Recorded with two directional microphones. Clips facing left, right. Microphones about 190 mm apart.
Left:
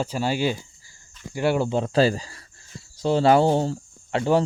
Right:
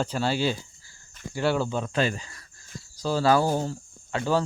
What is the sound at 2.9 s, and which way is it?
Speech, 25° left (ahead or behind).